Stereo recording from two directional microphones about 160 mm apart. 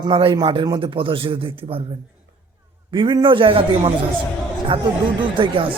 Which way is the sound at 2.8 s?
30° right (ahead or behind).